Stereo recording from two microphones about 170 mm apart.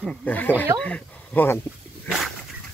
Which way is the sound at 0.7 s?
10° left (ahead or behind).